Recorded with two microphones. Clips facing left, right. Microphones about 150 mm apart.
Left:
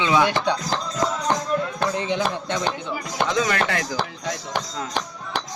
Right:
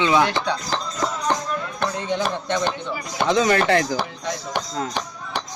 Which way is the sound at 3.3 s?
30° right (ahead or behind).